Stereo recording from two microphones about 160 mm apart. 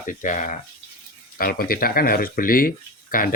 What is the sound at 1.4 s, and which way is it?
Speech, 65° left (ahead or behind).